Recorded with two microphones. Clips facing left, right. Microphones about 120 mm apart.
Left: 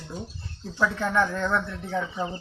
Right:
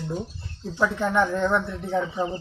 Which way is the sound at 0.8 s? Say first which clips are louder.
Right 2 dB; 15° right (ahead or behind).